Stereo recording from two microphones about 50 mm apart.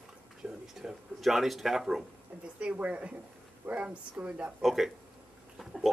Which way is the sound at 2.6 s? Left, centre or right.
Right.